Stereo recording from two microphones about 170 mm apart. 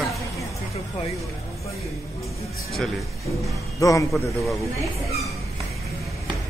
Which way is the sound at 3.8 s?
20° left (ahead or behind).